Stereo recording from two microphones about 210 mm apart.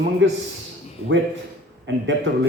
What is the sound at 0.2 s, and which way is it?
Speech, 60° right (ahead or behind).